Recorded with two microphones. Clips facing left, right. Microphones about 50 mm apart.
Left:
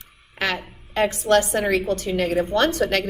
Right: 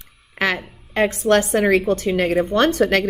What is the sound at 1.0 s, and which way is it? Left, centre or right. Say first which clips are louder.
A woman's voice: right 2 dB; right.